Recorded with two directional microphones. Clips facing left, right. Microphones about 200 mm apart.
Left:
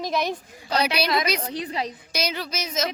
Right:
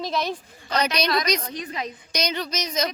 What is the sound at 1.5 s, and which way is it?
Speech, 30° left (ahead or behind).